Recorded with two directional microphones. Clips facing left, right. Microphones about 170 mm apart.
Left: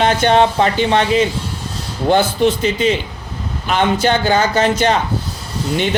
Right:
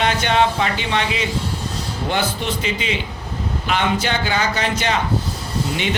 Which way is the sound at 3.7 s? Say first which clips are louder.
Left 6 dB; 40° left (ahead or behind).